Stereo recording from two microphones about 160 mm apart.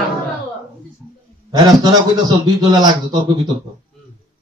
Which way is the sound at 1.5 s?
25° right (ahead or behind).